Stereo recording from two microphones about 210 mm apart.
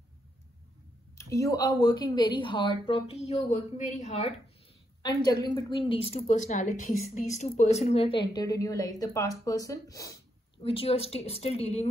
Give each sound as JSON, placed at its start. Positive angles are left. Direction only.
{"t": 1.1, "sound": "a woman's voice", "side_deg": 15}
{"t": 5.4, "sound": "a woman's voice", "side_deg": 20}